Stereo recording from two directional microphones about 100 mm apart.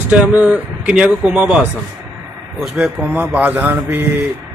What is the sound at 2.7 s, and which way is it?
Speech, 15° right (ahead or behind).